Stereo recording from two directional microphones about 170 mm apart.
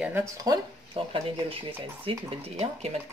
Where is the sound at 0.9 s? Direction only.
30° right (ahead or behind).